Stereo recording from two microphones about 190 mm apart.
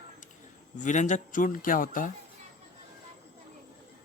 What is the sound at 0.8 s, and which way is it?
Speech, 40° left (ahead or behind).